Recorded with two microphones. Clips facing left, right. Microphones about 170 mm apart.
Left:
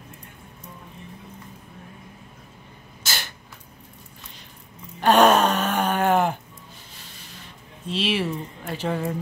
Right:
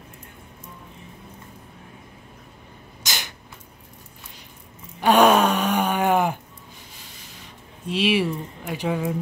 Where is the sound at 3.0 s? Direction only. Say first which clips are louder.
Even; 15° right (ahead or behind).